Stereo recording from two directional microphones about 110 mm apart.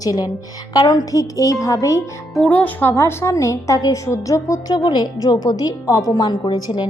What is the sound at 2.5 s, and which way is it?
A woman's voice, 15° left (ahead or behind).